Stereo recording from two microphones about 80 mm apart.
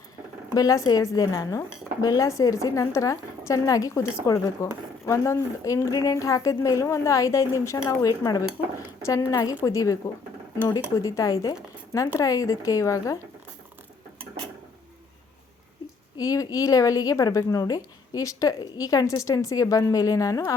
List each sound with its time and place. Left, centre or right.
0.5 s a woman's voice: left
7.9 s a woman's voice: left
9.3 s a woman's voice: left
11.0 s a woman's voice: left
16.1 s a woman's voice: left